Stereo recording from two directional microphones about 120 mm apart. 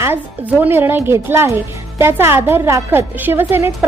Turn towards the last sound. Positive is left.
turn(degrees=-20)  # may be behind; listen again after turning